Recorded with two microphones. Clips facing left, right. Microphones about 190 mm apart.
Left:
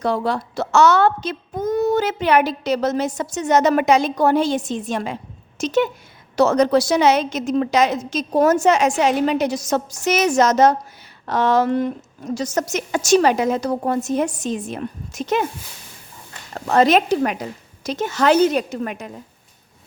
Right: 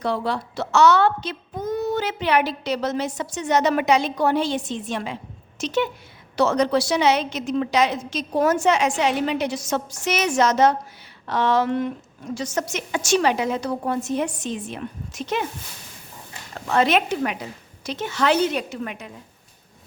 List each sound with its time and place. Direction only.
0.0 s a woman's voice: 45° left (ahead or behind)
16.6 s a woman's voice: 40° left (ahead or behind)